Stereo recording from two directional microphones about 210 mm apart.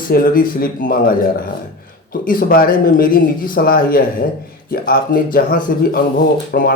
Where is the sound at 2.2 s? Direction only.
45° left (ahead or behind).